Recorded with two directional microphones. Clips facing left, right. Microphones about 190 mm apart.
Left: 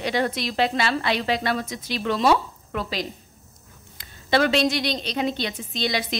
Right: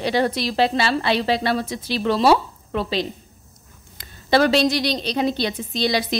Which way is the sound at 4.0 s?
40° right (ahead or behind).